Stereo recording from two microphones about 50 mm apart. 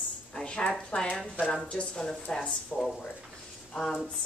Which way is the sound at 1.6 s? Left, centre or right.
Centre.